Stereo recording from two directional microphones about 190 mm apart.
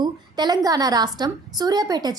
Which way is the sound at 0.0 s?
20° right (ahead or behind).